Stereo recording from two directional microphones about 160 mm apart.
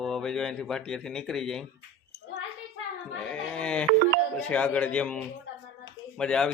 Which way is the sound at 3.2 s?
5° left (ahead or behind).